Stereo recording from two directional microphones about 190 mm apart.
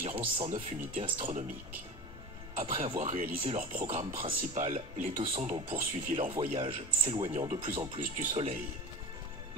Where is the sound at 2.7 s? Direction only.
30° right (ahead or behind).